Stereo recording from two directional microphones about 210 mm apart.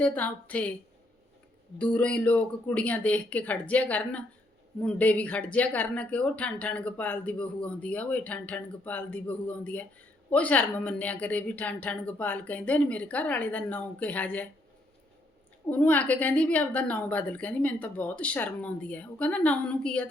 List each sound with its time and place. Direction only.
0.0 s speech: 5° left (ahead or behind)
1.8 s speech: 5° left (ahead or behind)
15.7 s speech: 5° left (ahead or behind)